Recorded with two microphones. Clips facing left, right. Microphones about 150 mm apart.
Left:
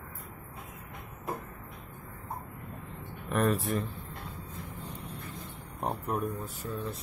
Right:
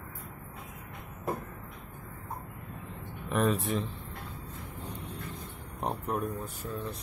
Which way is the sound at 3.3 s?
Centre (ahead or behind).